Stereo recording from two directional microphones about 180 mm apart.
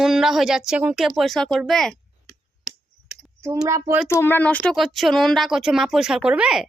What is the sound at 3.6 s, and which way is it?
Speech, 15° right (ahead or behind).